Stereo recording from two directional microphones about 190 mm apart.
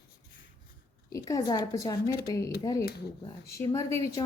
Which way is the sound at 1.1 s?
20° left (ahead or behind).